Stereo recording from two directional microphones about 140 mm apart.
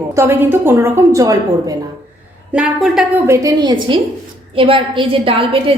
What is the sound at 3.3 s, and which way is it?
A woman's voice, 25° right (ahead or behind).